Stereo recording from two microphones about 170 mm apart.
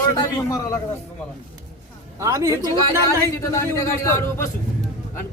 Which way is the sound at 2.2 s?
20° right (ahead or behind).